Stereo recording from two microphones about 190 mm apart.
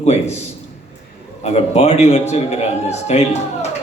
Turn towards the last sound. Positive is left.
turn(degrees=35)  # may be behind; listen again after turning